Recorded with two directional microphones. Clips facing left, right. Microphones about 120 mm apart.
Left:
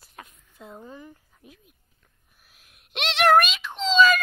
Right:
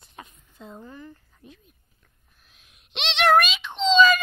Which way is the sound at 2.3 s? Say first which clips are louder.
Left 1 dB; 5° left (ahead or behind).